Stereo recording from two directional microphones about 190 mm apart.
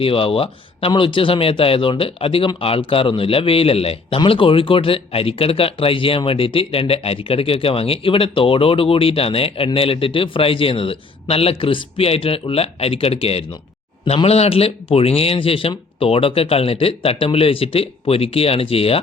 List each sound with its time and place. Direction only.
0.0 s speech: 30° left (ahead or behind)